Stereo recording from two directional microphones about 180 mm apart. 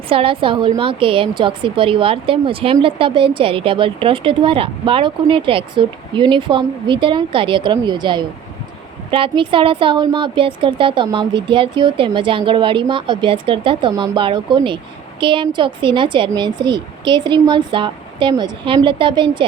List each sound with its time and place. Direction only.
0.1 s a woman's voice: 30° right (ahead or behind)